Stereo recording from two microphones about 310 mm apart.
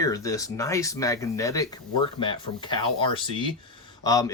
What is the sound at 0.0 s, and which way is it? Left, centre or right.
Speech, centre.